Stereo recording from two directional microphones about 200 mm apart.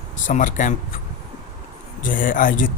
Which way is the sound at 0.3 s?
40° left (ahead or behind).